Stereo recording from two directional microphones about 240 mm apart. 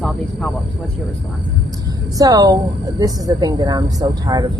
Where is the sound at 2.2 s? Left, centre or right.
Centre.